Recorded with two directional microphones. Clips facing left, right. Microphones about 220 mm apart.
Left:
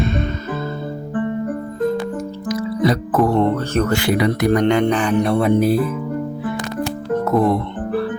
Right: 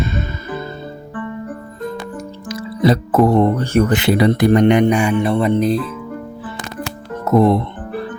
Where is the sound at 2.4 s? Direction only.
25° right (ahead or behind).